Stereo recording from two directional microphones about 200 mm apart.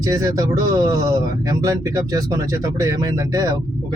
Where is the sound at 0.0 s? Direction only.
15° right (ahead or behind).